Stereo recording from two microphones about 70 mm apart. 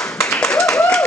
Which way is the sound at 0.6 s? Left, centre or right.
Left.